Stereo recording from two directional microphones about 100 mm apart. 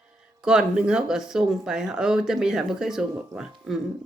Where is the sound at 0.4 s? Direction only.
5° right (ahead or behind).